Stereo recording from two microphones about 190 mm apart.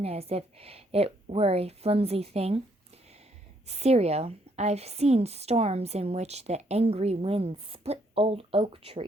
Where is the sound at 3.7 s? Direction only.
35° right (ahead or behind).